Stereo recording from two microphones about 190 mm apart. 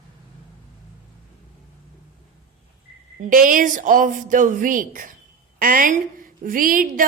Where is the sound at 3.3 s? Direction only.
45° right (ahead or behind).